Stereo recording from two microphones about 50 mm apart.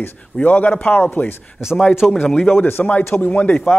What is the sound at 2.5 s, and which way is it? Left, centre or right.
Speech, left.